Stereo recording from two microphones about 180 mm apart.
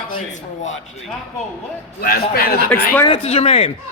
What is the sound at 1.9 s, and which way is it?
Speech, 55° left (ahead or behind).